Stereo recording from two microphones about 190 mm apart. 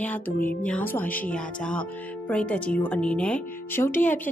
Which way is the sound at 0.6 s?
5° left (ahead or behind).